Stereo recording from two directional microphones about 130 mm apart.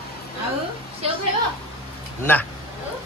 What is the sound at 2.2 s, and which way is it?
Speech, 15° left (ahead or behind).